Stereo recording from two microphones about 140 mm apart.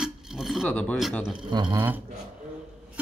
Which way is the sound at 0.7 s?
10° left (ahead or behind).